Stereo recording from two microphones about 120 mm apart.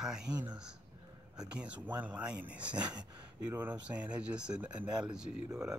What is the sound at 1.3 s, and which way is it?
Speech, 10° right (ahead or behind).